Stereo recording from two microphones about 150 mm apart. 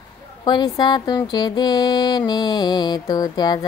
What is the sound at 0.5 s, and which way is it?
Music, 30° left (ahead or behind).